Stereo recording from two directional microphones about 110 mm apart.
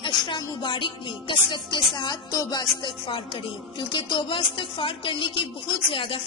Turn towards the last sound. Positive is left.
turn(degrees=55)  # may be behind; listen again after turning